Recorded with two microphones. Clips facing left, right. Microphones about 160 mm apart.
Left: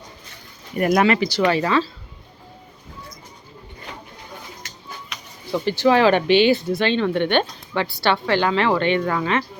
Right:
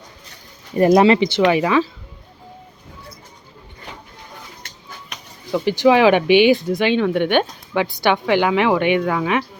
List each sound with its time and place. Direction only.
0.8 s speech: 25° right (ahead or behind)
1.5 s speech: 15° right (ahead or behind)
5.5 s speech: 15° right (ahead or behind)